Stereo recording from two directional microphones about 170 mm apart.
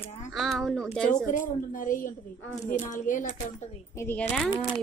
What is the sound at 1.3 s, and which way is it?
A woman's voice, 50° left (ahead or behind).